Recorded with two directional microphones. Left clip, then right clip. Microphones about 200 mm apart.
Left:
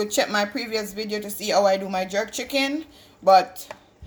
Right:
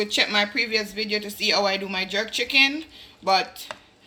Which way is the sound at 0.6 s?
50° left (ahead or behind).